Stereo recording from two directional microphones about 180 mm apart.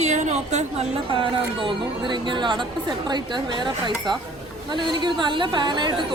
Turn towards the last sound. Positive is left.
turn(degrees=-25)  # may be behind; listen again after turning